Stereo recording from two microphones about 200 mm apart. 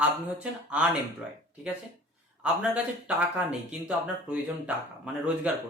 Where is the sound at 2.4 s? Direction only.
5° right (ahead or behind).